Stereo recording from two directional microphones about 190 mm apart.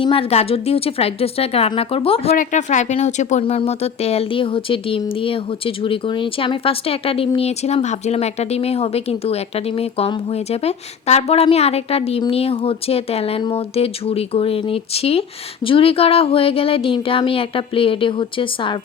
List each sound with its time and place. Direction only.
0.0 s speech: 30° left (ahead or behind)
2.3 s speech: 40° left (ahead or behind); by 18.8 s 25° left (ahead or behind)